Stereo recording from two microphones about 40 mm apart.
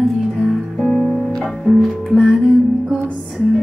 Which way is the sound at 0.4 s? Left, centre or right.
Centre.